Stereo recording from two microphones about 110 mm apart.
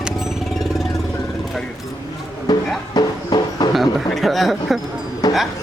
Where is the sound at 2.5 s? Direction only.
40° left (ahead or behind).